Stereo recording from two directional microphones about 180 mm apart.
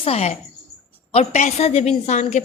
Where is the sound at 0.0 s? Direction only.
35° left (ahead or behind).